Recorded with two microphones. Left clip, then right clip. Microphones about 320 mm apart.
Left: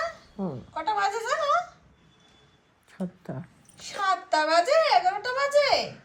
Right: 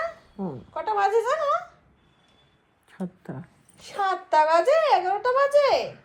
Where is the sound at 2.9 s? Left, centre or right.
Centre.